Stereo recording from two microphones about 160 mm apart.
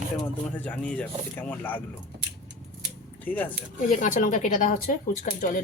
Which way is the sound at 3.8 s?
55° left (ahead or behind).